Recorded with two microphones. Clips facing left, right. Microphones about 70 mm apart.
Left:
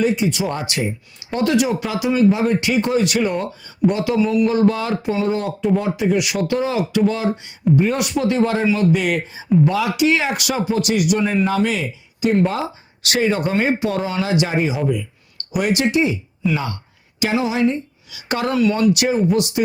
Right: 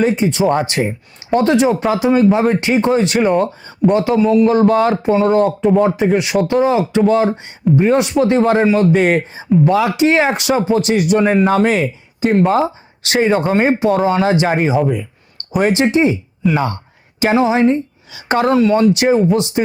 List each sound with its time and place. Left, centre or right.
0.0 s speech: right
8.2 s speech: right
11.2 s speech: right
13.9 s speech: right
14.8 s speech: right